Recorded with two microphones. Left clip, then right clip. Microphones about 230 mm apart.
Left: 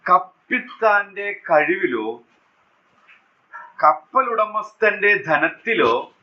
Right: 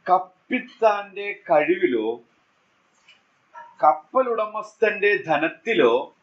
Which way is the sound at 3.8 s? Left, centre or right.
Centre.